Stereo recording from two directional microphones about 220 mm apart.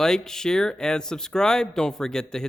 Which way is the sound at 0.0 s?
Centre (ahead or behind).